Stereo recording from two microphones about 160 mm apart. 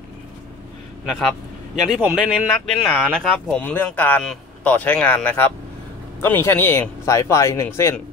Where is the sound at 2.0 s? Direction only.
10° right (ahead or behind).